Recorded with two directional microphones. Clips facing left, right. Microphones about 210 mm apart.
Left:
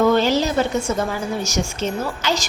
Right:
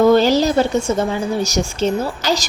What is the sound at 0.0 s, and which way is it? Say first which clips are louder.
A woman's voice: right 4 dB; 35° right (ahead or behind).